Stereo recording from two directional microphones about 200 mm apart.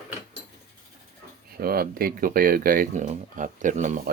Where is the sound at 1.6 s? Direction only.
50° right (ahead or behind).